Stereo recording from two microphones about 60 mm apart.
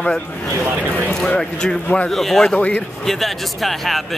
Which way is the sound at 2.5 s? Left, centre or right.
Left.